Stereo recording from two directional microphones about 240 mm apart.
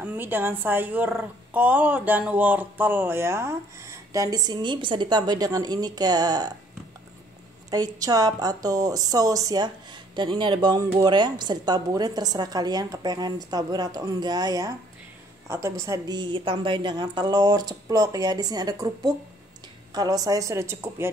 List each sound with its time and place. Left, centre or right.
0.0 s speech: centre
7.7 s speech: centre